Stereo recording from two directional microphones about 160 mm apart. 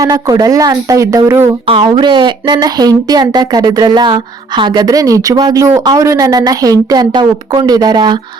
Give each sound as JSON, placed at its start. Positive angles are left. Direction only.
{"t": 0.0, "sound": "speech", "side_deg": -20}
{"t": 1.6, "sound": "speech", "side_deg": -30}